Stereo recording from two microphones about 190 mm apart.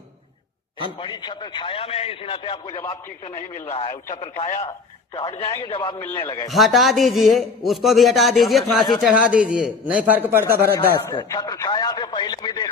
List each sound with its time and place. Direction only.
0.9 s a man's voice: 25° left (ahead or behind)
6.5 s a man's voice: centre (ahead or behind)
11.2 s a man's voice: 20° left (ahead or behind)